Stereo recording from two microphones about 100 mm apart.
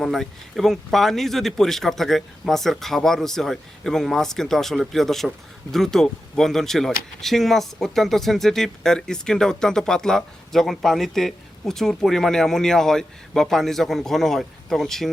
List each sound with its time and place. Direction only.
0.0 s speech: centre (ahead or behind)